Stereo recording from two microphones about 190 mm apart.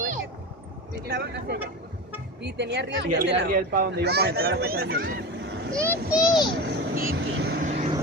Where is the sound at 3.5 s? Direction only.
50° right (ahead or behind).